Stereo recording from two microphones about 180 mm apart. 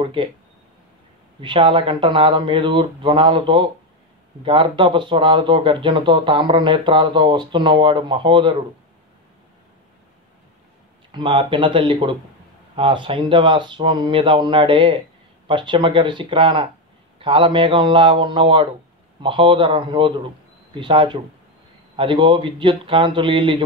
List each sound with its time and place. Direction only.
0.0 s speech: 30° right (ahead or behind)
1.4 s speech: 30° right (ahead or behind)
11.1 s speech: 25° right (ahead or behind)